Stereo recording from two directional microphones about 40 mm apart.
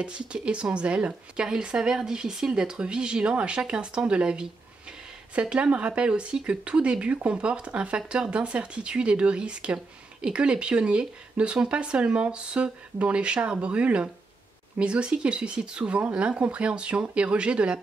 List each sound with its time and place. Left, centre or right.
0.0 s speech: right
1.4 s speech: centre